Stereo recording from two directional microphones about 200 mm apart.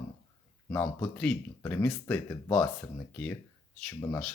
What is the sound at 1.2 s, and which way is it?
Speech, 5° left (ahead or behind).